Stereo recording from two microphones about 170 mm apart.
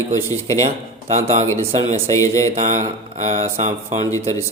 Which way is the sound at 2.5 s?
45° right (ahead or behind).